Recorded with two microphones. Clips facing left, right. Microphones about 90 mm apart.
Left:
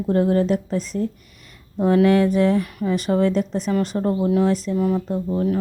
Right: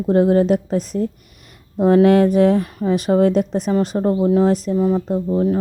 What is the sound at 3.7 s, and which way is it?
Speech, 30° right (ahead or behind).